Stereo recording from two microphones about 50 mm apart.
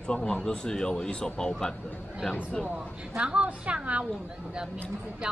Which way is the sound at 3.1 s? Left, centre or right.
Right.